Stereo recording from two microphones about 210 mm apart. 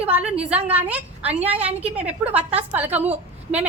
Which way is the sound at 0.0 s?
5° right (ahead or behind).